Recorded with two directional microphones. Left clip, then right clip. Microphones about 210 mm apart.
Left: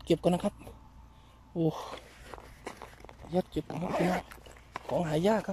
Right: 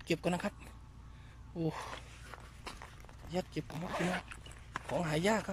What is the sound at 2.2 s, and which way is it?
Zipper, 25° left (ahead or behind).